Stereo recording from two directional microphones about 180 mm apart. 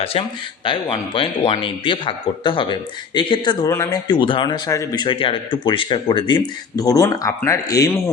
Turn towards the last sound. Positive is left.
turn(degrees=20)  # may be behind; listen again after turning